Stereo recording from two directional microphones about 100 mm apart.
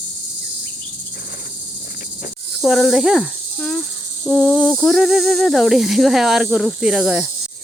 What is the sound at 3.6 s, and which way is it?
Cricket, 5° left (ahead or behind).